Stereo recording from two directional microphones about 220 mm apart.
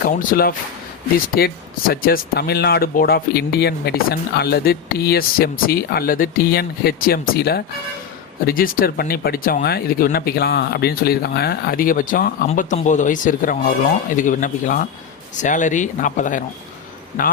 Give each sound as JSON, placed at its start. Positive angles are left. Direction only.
{"t": 0.2, "sound": "speech", "side_deg": 40}